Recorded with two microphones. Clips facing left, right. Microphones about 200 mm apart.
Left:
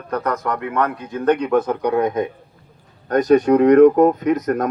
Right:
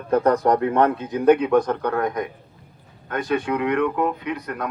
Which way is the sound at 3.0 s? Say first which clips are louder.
Left 10 dB; 40° left (ahead or behind).